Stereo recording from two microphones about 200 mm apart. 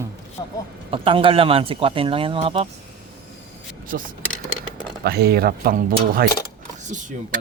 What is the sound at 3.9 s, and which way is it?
Speech, 45° right (ahead or behind).